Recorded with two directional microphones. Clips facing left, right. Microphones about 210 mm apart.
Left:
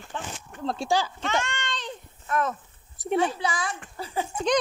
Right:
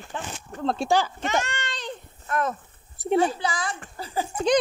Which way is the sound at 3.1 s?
30° right (ahead or behind).